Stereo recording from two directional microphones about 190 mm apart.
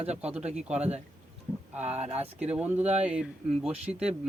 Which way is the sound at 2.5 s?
10° right (ahead or behind).